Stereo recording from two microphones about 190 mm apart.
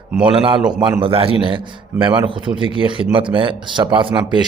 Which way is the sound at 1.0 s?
30° right (ahead or behind).